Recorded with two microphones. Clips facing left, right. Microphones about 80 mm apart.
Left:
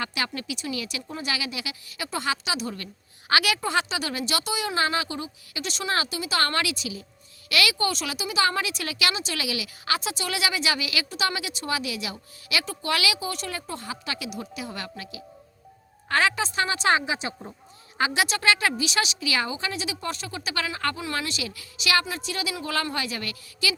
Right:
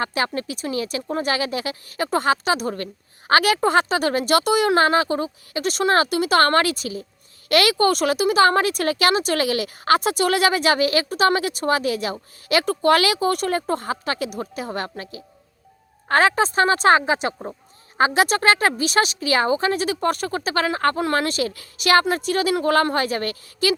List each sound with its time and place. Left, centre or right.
0.0 s speech: right